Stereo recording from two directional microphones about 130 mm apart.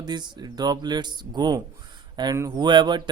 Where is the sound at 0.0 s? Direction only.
35° right (ahead or behind).